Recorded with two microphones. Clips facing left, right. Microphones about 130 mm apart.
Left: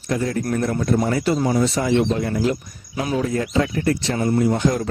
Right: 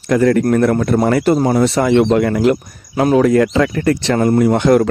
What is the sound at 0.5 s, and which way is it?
A man's voice, 65° right (ahead or behind).